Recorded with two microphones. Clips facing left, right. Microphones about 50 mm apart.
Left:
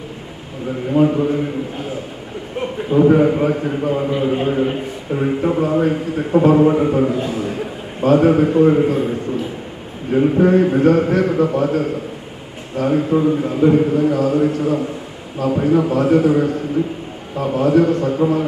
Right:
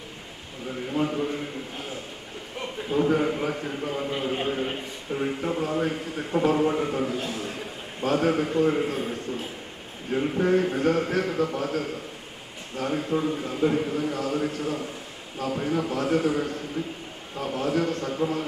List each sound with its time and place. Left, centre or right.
0.9 s a man's voice: left
2.9 s a man's voice: left
4.1 s a man's voice: centre
7.2 s a man's voice: centre
8.0 s a man's voice: left
10.1 s a man's voice: left
12.8 s a man's voice: centre; by 17.9 s left
17.9 s a man's voice: left